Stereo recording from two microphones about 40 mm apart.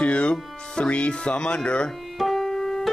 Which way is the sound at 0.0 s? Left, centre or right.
Left.